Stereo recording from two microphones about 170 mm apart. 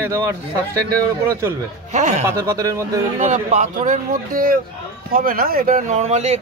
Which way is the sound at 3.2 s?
45° right (ahead or behind).